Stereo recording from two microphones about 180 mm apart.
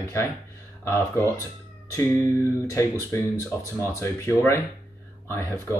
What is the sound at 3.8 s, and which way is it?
Speech, 15° left (ahead or behind).